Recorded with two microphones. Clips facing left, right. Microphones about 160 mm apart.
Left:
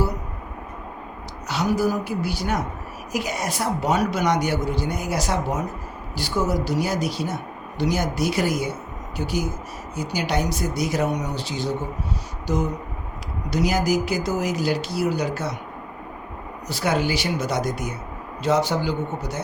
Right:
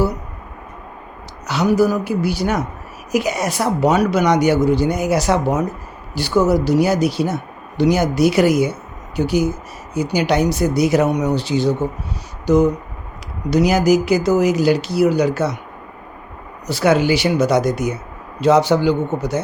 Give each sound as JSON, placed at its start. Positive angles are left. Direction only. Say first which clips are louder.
{"t": 1.5, "sound": "speech", "louder": "right 6 dB", "side_deg": -75}
{"t": 16.6, "sound": "speech", "louder": "right 8 dB", "side_deg": -75}